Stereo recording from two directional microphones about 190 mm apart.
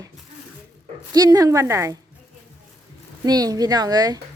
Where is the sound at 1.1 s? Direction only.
20° right (ahead or behind).